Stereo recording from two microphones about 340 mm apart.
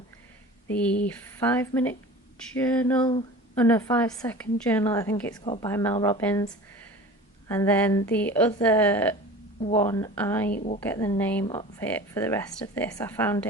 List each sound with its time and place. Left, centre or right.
0.7 s a woman's voice: centre
9.6 s speech: centre
10.5 s a woman's voice: left
10.8 s speech: centre